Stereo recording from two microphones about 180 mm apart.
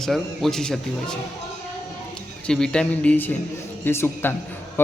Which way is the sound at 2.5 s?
5° left (ahead or behind).